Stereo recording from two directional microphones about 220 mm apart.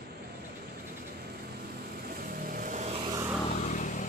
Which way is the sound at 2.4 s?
35° right (ahead or behind).